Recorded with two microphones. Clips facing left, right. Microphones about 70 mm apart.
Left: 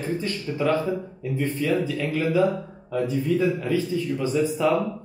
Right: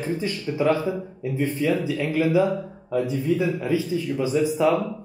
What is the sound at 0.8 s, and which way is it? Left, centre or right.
Speech, centre.